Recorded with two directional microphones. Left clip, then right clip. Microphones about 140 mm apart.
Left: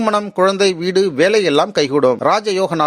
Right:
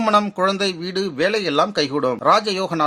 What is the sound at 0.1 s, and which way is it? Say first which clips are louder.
Speech: left 2 dB; 45° left (ahead or behind).